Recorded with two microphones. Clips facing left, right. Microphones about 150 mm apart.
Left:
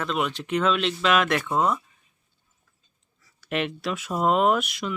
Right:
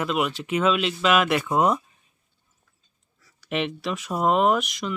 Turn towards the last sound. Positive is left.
turn(degrees=0)  # may be behind; listen again after turning